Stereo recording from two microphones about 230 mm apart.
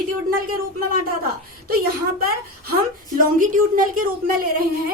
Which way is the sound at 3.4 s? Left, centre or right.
Right.